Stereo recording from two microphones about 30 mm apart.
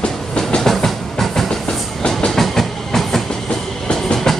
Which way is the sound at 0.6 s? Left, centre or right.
Centre.